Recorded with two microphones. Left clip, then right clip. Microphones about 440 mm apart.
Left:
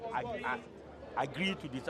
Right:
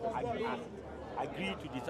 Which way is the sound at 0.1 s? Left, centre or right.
Left.